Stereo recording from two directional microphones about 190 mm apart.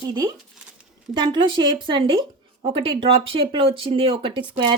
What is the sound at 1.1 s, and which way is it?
Speech, 25° right (ahead or behind).